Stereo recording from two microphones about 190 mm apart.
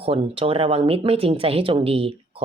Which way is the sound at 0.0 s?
30° right (ahead or behind).